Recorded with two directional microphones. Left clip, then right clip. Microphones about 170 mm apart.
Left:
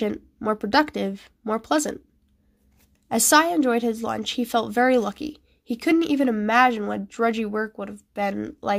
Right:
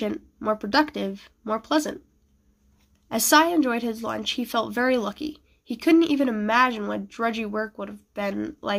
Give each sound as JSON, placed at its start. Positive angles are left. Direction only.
{"t": 0.0, "sound": "speech", "side_deg": 40}
{"t": 3.1, "sound": "a woman's voice", "side_deg": 40}